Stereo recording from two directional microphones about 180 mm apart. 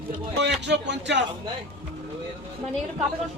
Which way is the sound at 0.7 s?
75° right (ahead or behind).